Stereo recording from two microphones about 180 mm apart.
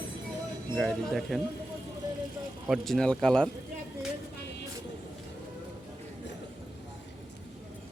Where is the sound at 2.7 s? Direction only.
Centre (ahead or behind).